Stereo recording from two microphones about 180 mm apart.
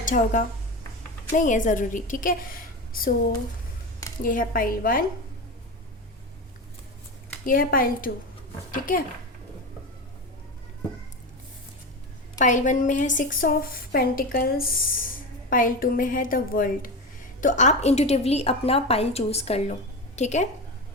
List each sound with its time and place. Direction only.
0.0 s a woman's voice: 45° left (ahead or behind)
4.2 s a woman's voice: 50° left (ahead or behind)
7.4 s a woman's voice: 50° left (ahead or behind)
12.4 s a woman's voice: 45° left (ahead or behind)